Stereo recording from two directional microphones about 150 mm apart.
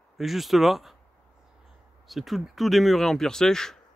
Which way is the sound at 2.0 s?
Centre (ahead or behind).